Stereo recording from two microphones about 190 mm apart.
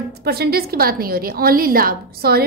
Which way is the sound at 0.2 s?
55° right (ahead or behind).